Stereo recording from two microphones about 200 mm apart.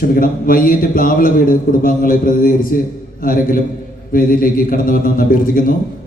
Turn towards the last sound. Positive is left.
turn(degrees=45)  # may be behind; listen again after turning